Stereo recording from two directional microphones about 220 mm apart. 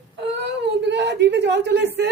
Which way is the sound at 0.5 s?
50° right (ahead or behind).